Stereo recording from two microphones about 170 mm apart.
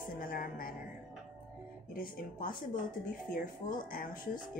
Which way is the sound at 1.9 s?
55° left (ahead or behind).